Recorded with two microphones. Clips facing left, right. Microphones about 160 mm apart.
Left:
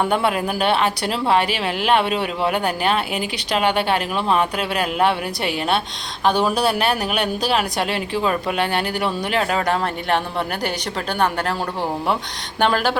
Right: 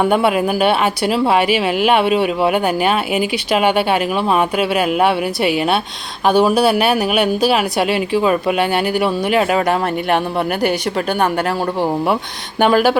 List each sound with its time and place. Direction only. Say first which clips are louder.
0.0 s speech: right 5 dB; 10° right (ahead or behind)
12.5 s speech: right 6 dB; 10° right (ahead or behind)